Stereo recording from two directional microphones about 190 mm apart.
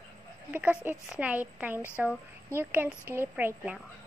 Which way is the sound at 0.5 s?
10° right (ahead or behind).